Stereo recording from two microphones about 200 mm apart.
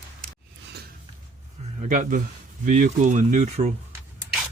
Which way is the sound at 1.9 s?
40° right (ahead or behind).